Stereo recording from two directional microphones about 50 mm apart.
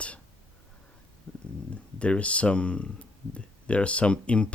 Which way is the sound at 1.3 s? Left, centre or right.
Centre.